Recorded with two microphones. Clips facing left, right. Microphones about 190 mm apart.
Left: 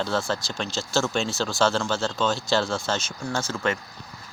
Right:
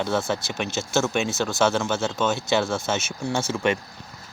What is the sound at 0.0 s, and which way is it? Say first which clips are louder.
Speech: right 2 dB; 20° right (ahead or behind).